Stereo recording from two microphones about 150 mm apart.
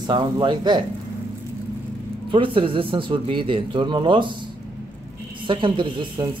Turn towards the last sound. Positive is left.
turn(degrees=-30)  # may be behind; listen again after turning